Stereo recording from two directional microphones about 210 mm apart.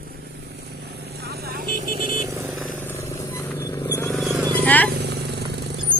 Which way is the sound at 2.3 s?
15° right (ahead or behind).